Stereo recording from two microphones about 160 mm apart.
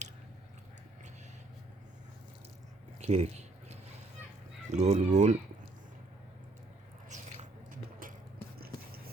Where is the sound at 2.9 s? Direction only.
45° right (ahead or behind).